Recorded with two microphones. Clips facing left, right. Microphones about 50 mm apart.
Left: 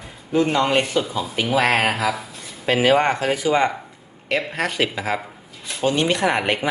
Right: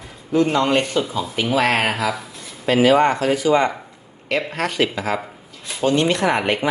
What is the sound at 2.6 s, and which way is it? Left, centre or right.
Speech, left.